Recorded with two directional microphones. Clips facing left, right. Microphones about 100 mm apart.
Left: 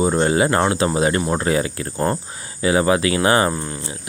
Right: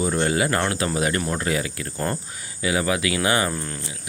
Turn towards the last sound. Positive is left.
turn(degrees=20)  # may be behind; listen again after turning